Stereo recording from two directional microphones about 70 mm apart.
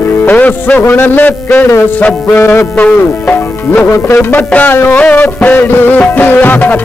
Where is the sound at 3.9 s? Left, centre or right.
Left.